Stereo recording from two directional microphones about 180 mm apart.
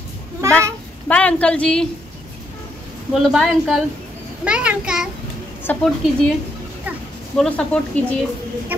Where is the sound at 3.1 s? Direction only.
Centre (ahead or behind).